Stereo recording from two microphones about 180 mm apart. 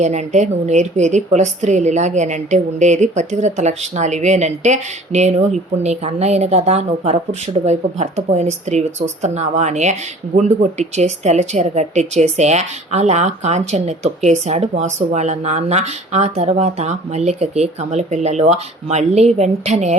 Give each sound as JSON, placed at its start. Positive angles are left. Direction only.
{"t": 0.0, "sound": "a woman's voice", "side_deg": -40}